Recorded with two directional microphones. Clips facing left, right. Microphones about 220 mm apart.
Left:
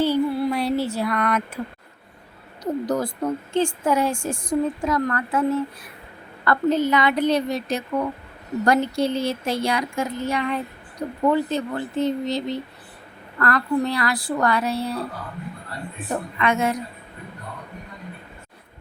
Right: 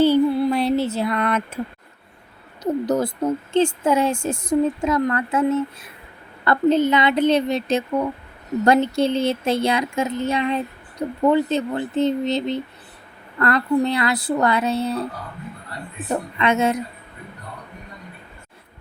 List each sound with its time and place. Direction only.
0.0 s a sound: 25° right (ahead or behind)
2.8 s a woman's voice: 20° right (ahead or behind)
16.4 s a woman's voice: 25° right (ahead or behind)